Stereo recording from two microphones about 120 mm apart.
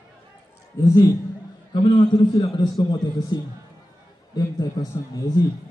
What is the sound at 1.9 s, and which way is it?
A man's voice, 35° left (ahead or behind).